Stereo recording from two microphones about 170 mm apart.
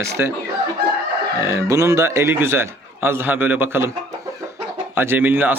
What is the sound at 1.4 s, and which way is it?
A man's voice, 20° right (ahead or behind).